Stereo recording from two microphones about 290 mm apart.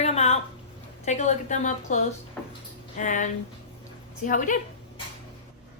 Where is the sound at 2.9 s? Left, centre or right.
Left.